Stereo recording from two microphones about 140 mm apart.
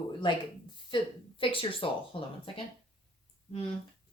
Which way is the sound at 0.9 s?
40° left (ahead or behind).